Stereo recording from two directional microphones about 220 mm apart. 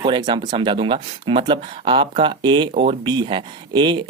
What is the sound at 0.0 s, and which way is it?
Speech, 20° right (ahead or behind).